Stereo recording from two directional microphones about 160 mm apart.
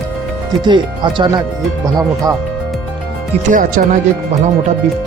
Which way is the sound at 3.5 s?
55° right (ahead or behind).